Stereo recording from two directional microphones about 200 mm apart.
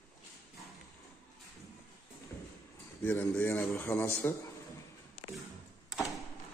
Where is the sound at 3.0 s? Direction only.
10° left (ahead or behind).